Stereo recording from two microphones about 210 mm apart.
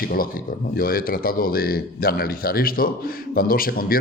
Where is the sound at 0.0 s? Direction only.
45° left (ahead or behind).